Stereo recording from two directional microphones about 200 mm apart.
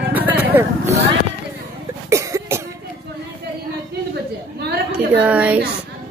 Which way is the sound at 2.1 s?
15° right (ahead or behind).